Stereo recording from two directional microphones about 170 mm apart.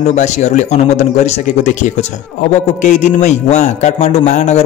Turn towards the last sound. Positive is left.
turn(degrees=40)  # may be behind; listen again after turning